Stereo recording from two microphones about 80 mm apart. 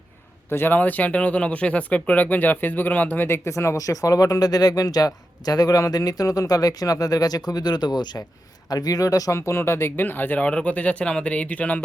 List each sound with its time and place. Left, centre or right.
0.5 s speech: left
3.2 s speech: left; by 11.8 s centre